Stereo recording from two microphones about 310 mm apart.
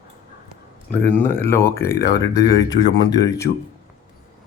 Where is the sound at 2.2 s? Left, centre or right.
Centre.